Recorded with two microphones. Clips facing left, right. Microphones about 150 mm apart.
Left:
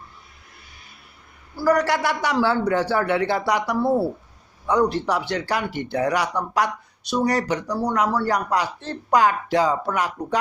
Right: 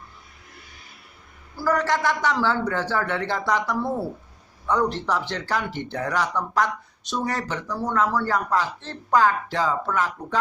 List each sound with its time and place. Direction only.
2.0 s speech: 10° left (ahead or behind)
3.8 s speech: 30° left (ahead or behind)
4.6 s speech: 10° left (ahead or behind)